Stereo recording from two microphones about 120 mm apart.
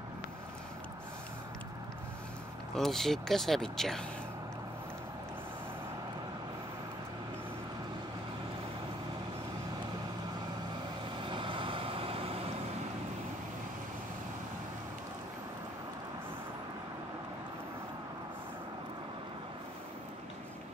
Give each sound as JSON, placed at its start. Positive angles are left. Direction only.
{"t": 2.7, "sound": "speech", "side_deg": 5}
{"t": 11.2, "sound": "vehicle", "side_deg": -45}